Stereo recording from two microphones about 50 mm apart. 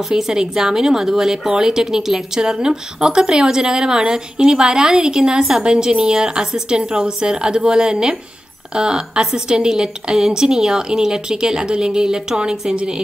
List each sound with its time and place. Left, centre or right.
0.1 s a woman's voice: centre